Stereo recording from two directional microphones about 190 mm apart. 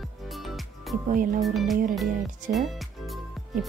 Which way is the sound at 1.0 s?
45° right (ahead or behind).